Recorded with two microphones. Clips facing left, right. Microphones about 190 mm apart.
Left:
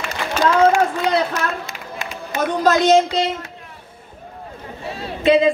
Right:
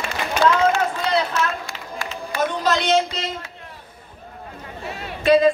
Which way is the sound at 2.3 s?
20° left (ahead or behind).